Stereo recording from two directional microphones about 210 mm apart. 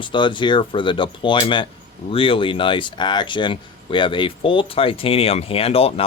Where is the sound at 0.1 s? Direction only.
20° left (ahead or behind).